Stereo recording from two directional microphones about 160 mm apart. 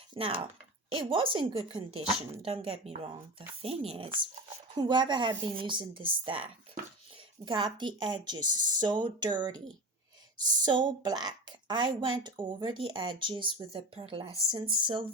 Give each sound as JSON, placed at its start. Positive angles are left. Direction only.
{"t": 0.1, "sound": "a woman's voice", "side_deg": -35}
{"t": 7.4, "sound": "a woman's voice", "side_deg": -30}